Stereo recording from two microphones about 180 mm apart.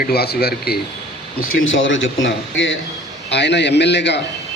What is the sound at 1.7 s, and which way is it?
Speech, 90° left.